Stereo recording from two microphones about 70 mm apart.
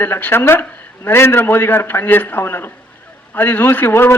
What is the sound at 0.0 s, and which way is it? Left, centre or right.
A man's voice, left.